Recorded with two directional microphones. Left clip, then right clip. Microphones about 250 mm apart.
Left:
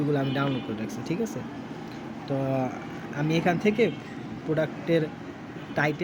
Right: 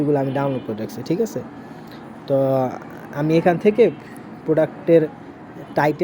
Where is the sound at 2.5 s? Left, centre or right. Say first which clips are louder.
Right 9 dB; centre.